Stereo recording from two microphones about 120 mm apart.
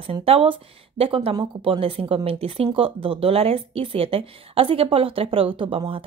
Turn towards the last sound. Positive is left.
turn(degrees=-50)  # may be behind; listen again after turning